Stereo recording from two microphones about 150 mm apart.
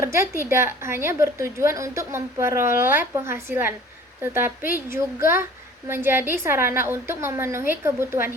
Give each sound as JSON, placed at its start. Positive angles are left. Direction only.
{"t": 0.0, "sound": "a woman's voice", "side_deg": -20}